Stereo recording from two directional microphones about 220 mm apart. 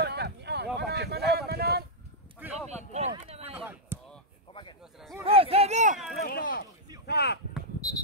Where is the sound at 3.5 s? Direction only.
10° right (ahead or behind).